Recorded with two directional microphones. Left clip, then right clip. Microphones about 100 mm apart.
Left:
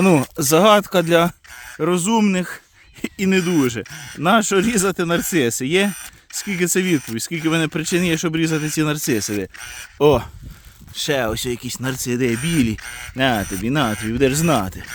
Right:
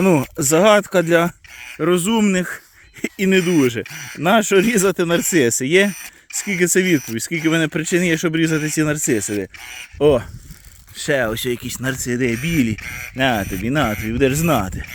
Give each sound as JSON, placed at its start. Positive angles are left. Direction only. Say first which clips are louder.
{"t": 0.0, "sound": "speech", "louder": "even", "side_deg": 40}
{"t": 1.8, "sound": "speech", "louder": "right 1 dB", "side_deg": 20}
{"t": 10.0, "sound": "speech", "louder": "even", "side_deg": 50}
{"t": 11.0, "sound": "speech", "louder": "right 2 dB", "side_deg": 35}
{"t": 11.3, "sound": "speech", "louder": "right 1 dB", "side_deg": 15}
{"t": 11.9, "sound": "speech", "louder": "right 1 dB", "side_deg": 30}
{"t": 13.4, "sound": "speech", "louder": "right 1 dB", "side_deg": 15}